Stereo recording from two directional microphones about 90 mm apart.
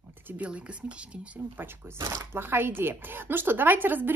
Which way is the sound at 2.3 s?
25° right (ahead or behind).